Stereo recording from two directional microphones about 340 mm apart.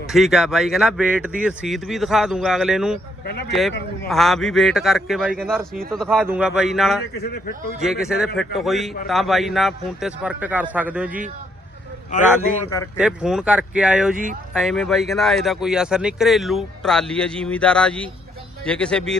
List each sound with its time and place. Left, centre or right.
0.1 s speech: centre
4.1 s speech: centre
12.1 s a man's voice: left
13.0 s speech: centre